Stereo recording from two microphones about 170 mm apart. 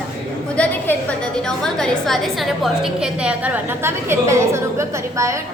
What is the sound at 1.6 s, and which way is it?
A woman's voice, 5° left (ahead or behind).